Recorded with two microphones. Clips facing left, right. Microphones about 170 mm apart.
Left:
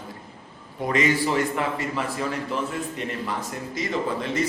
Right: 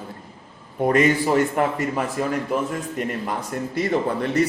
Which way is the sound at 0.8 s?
50° right (ahead or behind).